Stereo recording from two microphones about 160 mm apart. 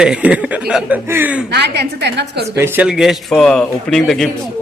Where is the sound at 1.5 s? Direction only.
90° right.